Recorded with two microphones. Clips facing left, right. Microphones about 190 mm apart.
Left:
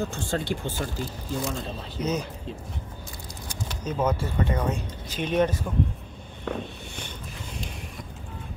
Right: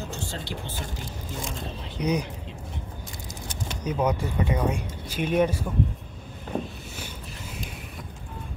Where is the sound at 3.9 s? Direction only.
15° right (ahead or behind).